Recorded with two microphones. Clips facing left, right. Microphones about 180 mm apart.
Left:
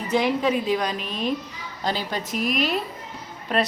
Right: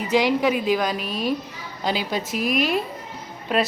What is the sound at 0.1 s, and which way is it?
Speech, 90° right.